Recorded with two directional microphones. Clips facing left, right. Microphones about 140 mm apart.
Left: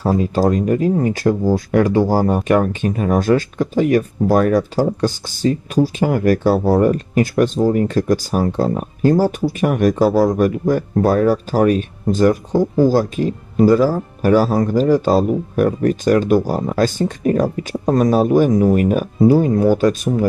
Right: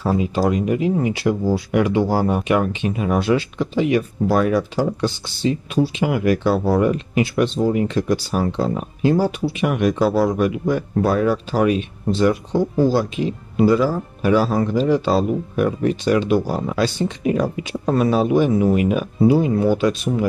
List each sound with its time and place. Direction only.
0.2 s speech: 45° left (ahead or behind)